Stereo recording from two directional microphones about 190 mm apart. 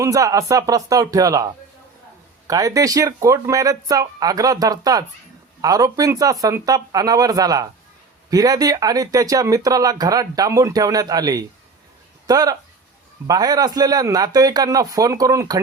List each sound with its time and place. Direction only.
0.0 s speech: 20° right (ahead or behind)
2.5 s speech: 15° right (ahead or behind)